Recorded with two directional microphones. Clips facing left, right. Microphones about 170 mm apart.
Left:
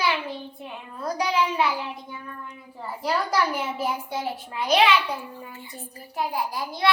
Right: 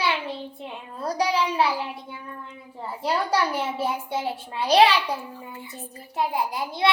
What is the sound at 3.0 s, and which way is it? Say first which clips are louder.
A child's voice: right 1 dB; 30° right (ahead or behind).